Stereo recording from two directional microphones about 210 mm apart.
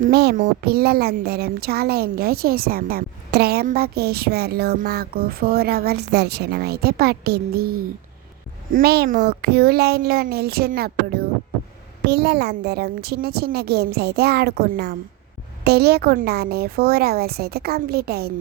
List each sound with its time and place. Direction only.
0.0 s speech: 50° right (ahead or behind)